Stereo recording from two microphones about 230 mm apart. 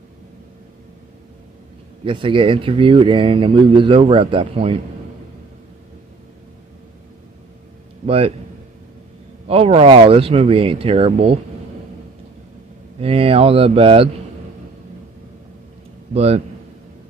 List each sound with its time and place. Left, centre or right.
2.0 s speech: right
9.5 s speech: right
13.0 s speech: right
16.1 s a man's voice: right